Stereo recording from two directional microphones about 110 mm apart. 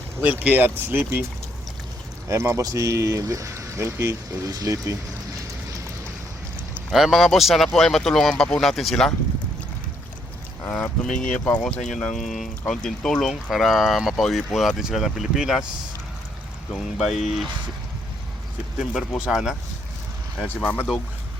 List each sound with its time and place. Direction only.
0.2 s speech: 15° right (ahead or behind)
2.2 s speech: 25° right (ahead or behind)
6.9 s speech: centre (ahead or behind)
10.7 s speech: 10° left (ahead or behind)
16.7 s speech: centre (ahead or behind)
18.8 s speech: centre (ahead or behind)